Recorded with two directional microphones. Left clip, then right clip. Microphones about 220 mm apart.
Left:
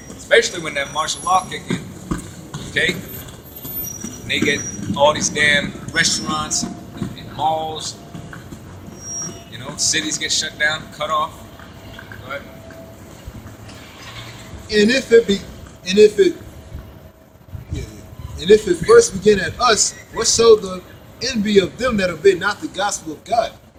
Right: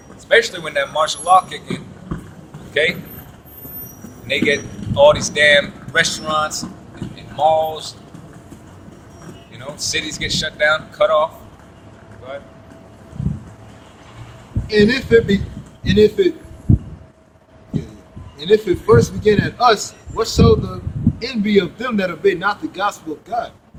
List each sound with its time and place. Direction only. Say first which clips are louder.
0.3 s speech: even; 10° right (ahead or behind)
2.8 s speech: right 1 dB; 10° right (ahead or behind)
4.3 s speech: right 2 dB; 15° right (ahead or behind)
9.7 s speech: left 2 dB; 10° right (ahead or behind)
14.7 s a man's voice: even; centre (ahead or behind)
18.3 s a man's voice: left 2 dB; 10° left (ahead or behind)